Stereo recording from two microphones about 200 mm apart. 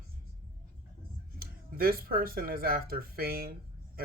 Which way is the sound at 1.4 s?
45° right (ahead or behind).